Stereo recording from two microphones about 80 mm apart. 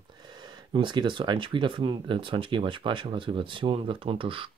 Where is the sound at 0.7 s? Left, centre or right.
Right.